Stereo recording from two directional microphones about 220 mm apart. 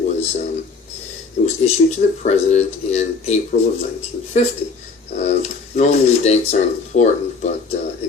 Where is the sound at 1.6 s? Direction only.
35° left (ahead or behind).